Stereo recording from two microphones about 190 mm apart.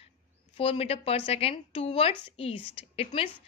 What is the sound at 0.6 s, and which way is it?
A woman's voice, 30° left (ahead or behind).